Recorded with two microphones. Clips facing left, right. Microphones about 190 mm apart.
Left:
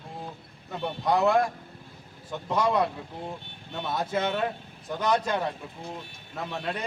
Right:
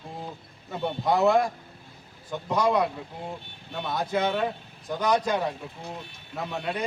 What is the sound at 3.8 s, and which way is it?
Speech, 5° left (ahead or behind).